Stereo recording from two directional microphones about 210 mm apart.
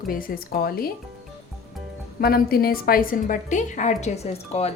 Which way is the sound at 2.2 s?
45° left (ahead or behind).